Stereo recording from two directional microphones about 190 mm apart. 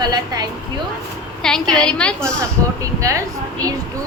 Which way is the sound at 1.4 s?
5° left (ahead or behind).